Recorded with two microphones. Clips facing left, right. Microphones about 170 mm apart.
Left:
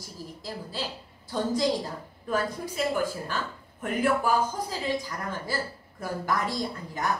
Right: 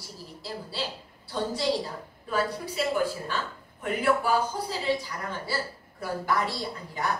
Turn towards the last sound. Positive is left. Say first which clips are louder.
# left 1 dB
turn(degrees=45)  # may be behind; listen again after turning